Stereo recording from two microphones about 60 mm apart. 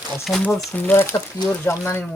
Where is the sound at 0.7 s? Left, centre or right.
Left.